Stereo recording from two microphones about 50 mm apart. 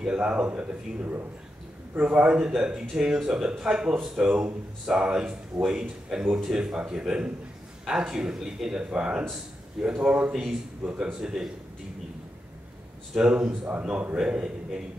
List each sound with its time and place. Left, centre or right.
0.0 s a man's voice: right
8.9 s a man's voice: right
10.8 s a man's voice: right
11.2 s speech: centre
13.1 s a man's voice: right
13.5 s speech: right
14.1 s speech: centre